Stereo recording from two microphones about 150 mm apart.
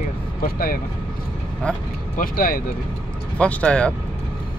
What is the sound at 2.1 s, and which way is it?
Speech, 75° left (ahead or behind).